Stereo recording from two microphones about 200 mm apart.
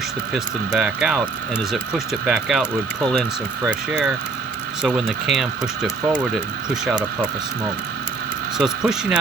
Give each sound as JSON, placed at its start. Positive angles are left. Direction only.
{"t": 0.3, "sound": "speech", "side_deg": -5}
{"t": 3.7, "sound": "speech", "side_deg": -5}
{"t": 8.5, "sound": "speech", "side_deg": -5}